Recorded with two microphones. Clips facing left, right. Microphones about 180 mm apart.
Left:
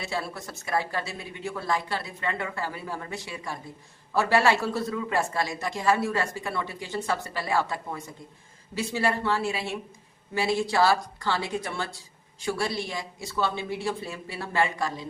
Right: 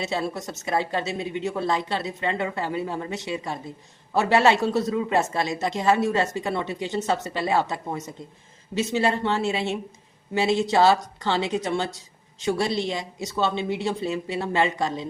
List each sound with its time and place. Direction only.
0.0 s a woman's voice: 20° right (ahead or behind)